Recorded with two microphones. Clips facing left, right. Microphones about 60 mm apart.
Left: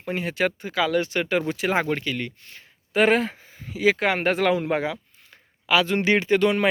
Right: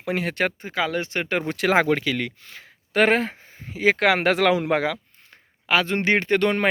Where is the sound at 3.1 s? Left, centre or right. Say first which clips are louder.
Even; right.